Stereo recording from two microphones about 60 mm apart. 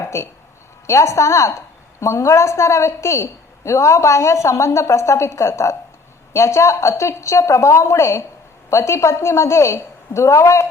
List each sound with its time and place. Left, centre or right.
0.0 s a woman's voice: left